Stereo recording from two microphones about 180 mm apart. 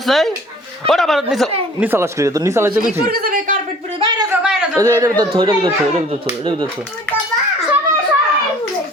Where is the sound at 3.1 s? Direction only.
55° right (ahead or behind).